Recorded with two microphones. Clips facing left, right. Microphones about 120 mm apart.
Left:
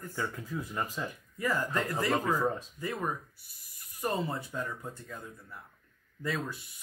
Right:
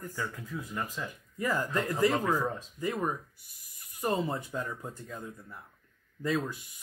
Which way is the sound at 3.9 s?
15° right (ahead or behind).